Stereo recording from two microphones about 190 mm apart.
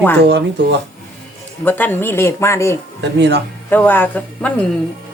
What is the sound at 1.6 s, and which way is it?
A man's voice, 10° left (ahead or behind).